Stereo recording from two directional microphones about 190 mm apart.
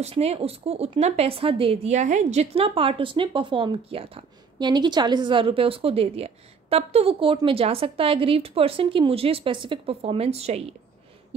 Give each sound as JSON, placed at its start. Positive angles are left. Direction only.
{"t": 0.0, "sound": "a woman's voice", "side_deg": -35}